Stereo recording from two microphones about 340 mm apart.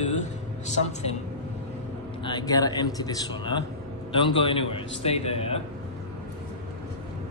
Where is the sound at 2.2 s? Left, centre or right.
Centre.